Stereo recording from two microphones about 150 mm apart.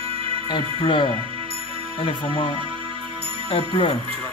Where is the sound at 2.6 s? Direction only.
35° right (ahead or behind).